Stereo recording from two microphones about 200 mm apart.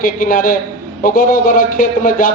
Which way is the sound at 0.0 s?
45° left (ahead or behind).